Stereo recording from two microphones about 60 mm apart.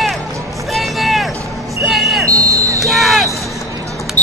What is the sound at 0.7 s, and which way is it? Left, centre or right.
Vehicle, centre.